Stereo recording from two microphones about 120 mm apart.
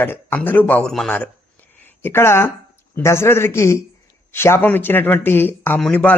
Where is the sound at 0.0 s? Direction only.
15° left (ahead or behind).